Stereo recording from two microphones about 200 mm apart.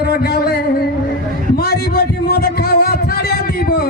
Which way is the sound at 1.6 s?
50° left (ahead or behind).